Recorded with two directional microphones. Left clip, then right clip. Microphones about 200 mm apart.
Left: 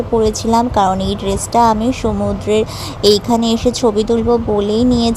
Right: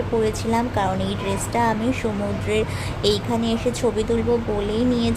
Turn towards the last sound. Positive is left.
turn(degrees=40)  # may be behind; listen again after turning